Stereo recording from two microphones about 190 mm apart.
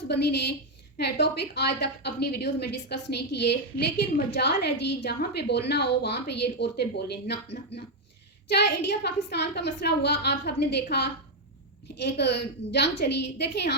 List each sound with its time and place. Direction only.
0.1 s a woman's voice: 60° left (ahead or behind)